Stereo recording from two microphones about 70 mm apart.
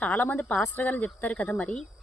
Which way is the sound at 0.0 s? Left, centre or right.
Left.